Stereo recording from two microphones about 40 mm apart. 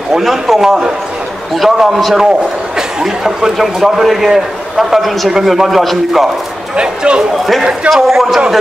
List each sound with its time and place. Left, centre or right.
0.1 s a man's voice: centre
0.6 s a man's voice: centre
1.5 s a man's voice: centre
3.0 s a man's voice: centre
6.8 s speech: right
7.9 s a man's voice: centre